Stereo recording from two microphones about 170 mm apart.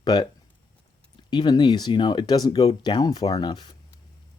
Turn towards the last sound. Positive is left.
turn(degrees=25)  # may be behind; listen again after turning